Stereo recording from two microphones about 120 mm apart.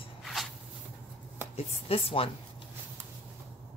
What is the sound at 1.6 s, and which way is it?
Speech, 55° left (ahead or behind).